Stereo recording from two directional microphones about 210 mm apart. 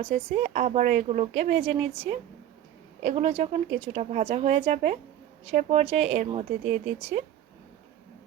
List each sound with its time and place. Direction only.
0.3 s speech: 30° right (ahead or behind)
3.0 s speech: 30° right (ahead or behind)